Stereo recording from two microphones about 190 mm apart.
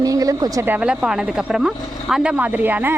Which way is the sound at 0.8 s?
5° right (ahead or behind).